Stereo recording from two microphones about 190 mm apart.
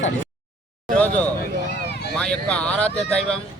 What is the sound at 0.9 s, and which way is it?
Speech, 10° left (ahead or behind).